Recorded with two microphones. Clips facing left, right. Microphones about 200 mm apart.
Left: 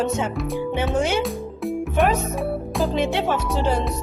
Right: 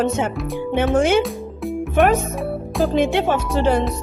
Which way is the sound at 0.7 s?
50° right (ahead or behind).